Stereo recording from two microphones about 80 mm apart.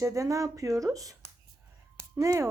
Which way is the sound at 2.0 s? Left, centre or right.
Right.